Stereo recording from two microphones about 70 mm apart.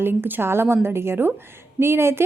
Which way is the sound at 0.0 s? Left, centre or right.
Right.